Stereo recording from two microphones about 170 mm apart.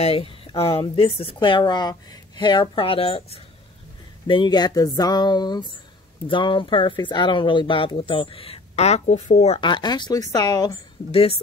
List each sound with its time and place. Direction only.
0.0 s speech: 35° left (ahead or behind)
11.1 s speech: 35° left (ahead or behind)